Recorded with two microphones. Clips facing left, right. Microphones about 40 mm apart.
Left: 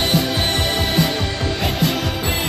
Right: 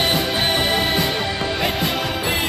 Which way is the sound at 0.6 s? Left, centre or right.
Centre.